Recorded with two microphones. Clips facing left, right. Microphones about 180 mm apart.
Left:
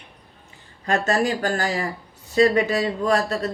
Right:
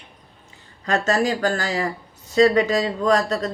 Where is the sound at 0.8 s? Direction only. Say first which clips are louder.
Right 1 dB; 35° right (ahead or behind).